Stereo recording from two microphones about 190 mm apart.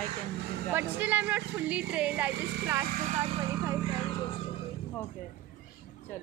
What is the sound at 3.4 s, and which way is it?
Vehicle, 15° right (ahead or behind).